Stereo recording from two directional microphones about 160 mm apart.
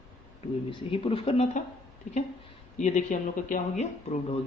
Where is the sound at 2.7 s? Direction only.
50° left (ahead or behind).